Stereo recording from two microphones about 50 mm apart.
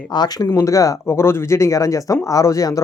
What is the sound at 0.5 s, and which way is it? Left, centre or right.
Speech, left.